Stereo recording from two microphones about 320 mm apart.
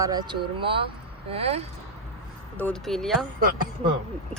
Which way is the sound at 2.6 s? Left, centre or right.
Centre.